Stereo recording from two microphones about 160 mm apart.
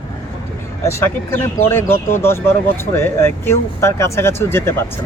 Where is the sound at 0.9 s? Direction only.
15° left (ahead or behind).